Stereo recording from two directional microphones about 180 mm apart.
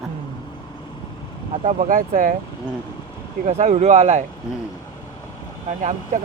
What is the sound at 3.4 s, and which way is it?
Speech, 40° right (ahead or behind).